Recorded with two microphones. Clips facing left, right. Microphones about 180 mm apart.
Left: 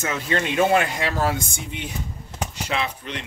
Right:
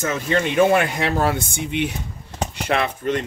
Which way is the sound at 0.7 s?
60° right (ahead or behind).